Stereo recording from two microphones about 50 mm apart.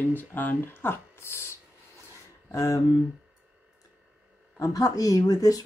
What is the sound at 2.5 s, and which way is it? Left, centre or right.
Speech, left.